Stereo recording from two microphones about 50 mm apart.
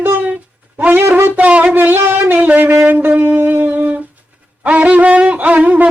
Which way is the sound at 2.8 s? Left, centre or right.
Right.